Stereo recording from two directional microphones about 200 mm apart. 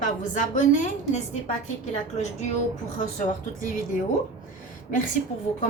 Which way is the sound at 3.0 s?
40° left (ahead or behind).